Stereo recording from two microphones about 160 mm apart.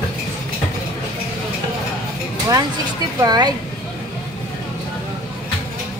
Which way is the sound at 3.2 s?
25° right (ahead or behind).